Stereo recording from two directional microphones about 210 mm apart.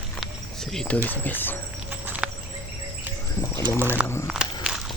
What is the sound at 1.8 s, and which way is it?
Clip-clop, 5° right (ahead or behind).